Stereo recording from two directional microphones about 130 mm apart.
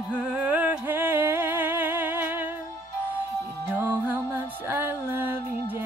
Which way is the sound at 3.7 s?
15° right (ahead or behind).